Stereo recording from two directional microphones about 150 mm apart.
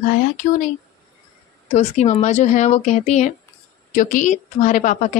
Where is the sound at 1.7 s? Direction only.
50° left (ahead or behind).